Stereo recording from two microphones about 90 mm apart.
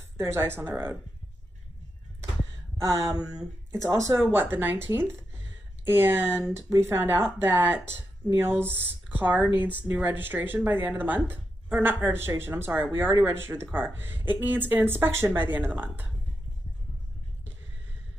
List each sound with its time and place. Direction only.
0.2 s speech: 30° right (ahead or behind)
3.7 s speech: 35° right (ahead or behind)
4.2 s speech: 25° right (ahead or behind)